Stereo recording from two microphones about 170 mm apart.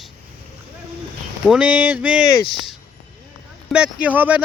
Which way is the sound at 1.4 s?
5° right (ahead or behind).